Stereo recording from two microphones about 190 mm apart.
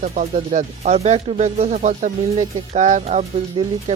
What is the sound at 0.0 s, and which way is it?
Speech, 40° right (ahead or behind).